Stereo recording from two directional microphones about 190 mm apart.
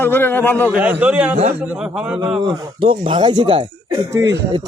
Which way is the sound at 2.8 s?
25° right (ahead or behind).